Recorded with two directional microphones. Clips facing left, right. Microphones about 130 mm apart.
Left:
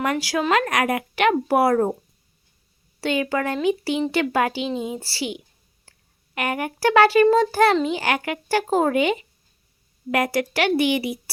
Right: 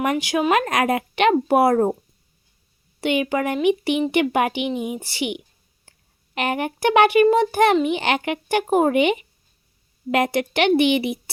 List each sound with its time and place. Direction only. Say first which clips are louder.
0.0 s a child's voice: right 2 dB; 20° right (ahead or behind)
3.0 s a child's voice: right 2 dB; 20° right (ahead or behind)
5.9 s a sound: right 1 dB; 20° right (ahead or behind)
6.3 s a child's voice: right 2 dB; 25° right (ahead or behind)